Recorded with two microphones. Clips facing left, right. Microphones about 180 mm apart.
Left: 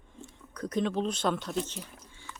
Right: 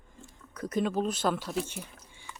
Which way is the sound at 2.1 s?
15° right (ahead or behind).